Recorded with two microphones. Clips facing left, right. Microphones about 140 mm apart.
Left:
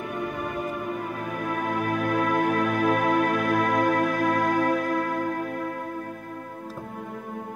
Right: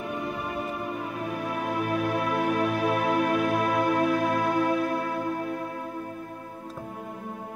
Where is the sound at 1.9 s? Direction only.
45° left (ahead or behind).